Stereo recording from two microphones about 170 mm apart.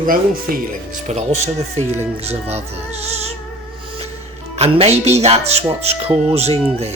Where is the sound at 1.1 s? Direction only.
40° right (ahead or behind).